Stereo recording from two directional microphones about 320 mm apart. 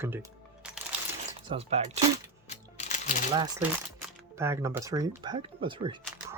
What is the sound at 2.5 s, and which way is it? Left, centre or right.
Music, left.